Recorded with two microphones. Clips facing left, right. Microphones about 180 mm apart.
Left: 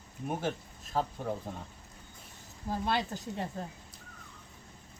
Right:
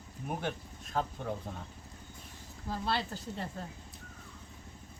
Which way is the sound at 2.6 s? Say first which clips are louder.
Left 2 dB; 15° left (ahead or behind).